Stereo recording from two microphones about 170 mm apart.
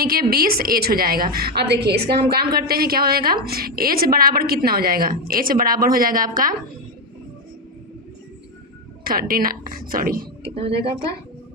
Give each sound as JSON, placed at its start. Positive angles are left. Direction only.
{"t": 0.0, "sound": "a woman's voice", "side_deg": -60}
{"t": 9.0, "sound": "a woman's voice", "side_deg": -60}